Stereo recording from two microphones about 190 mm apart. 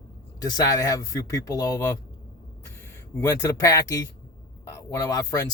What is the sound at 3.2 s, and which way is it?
Speech, 15° left (ahead or behind).